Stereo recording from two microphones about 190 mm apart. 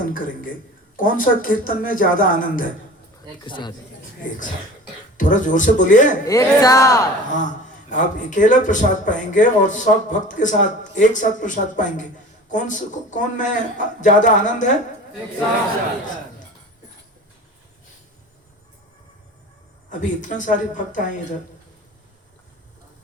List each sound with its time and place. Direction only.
0.9 s speech: 45° left (ahead or behind)
3.4 s speech: 25° left (ahead or behind)
5.1 s speech: 40° left (ahead or behind)
6.2 s speech: 20° left (ahead or behind)
7.3 s a man's voice: 40° left (ahead or behind)
19.9 s speech: 40° left (ahead or behind)